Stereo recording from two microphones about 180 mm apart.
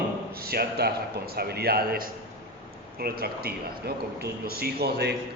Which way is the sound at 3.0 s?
60° right (ahead or behind).